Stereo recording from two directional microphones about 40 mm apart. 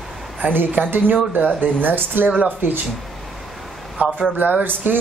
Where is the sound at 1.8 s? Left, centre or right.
Right.